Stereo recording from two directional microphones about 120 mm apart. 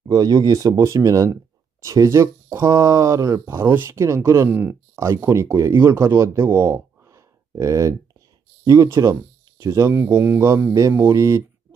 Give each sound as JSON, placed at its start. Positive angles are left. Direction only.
{"t": 0.1, "sound": "speech", "side_deg": -35}